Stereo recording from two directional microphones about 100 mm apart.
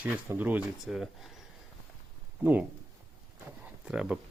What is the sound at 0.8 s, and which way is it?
Speech, 5° right (ahead or behind).